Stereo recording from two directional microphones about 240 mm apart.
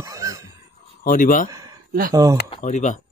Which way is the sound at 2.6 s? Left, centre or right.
Left.